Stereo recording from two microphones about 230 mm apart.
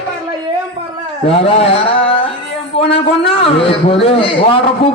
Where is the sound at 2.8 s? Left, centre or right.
Left.